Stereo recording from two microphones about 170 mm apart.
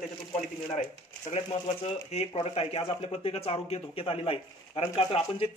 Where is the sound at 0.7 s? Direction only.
45° left (ahead or behind).